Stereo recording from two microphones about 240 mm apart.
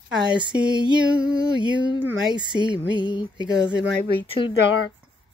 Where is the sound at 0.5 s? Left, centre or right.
Centre.